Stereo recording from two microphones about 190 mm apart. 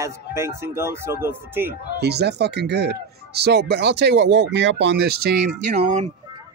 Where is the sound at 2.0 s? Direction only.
60° right (ahead or behind).